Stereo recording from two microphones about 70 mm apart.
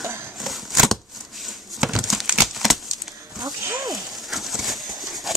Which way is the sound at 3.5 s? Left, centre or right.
Right.